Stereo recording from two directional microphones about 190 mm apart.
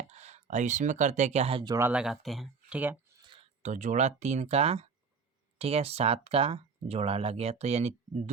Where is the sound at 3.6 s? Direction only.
40° right (ahead or behind).